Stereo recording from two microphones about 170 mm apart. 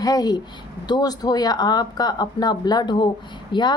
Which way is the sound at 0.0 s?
25° left (ahead or behind).